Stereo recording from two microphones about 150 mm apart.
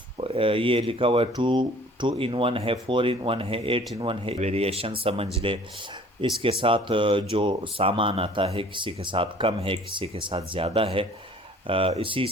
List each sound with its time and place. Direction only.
0.2 s speech: 35° right (ahead or behind)